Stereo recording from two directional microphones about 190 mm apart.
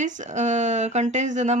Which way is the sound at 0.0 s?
40° right (ahead or behind).